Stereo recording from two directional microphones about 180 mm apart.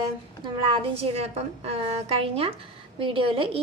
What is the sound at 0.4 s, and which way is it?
A woman's voice, 30° right (ahead or behind).